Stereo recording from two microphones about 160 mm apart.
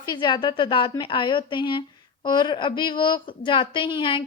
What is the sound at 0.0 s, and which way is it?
A woman's voice, 25° left (ahead or behind).